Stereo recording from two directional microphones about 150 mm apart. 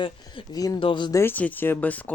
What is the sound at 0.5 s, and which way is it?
Speech, 25° left (ahead or behind).